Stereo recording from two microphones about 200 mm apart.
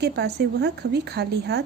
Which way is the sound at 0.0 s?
55° right (ahead or behind).